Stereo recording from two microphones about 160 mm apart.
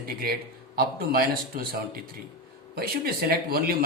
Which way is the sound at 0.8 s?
65° right (ahead or behind).